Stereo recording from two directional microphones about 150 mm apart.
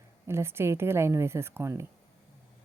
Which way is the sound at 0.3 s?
15° right (ahead or behind).